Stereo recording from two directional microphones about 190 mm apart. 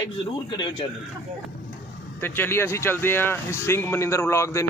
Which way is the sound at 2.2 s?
10° left (ahead or behind).